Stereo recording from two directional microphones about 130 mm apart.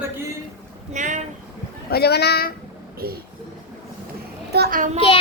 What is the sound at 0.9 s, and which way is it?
Speech, 70° right (ahead or behind).